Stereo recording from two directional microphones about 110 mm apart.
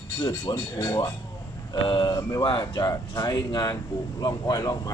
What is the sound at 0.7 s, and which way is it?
Speech, 30° left (ahead or behind).